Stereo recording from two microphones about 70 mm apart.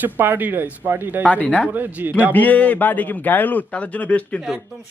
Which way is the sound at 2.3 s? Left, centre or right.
Left.